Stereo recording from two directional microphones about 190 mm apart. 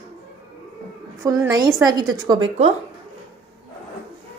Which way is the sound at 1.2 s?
15° right (ahead or behind).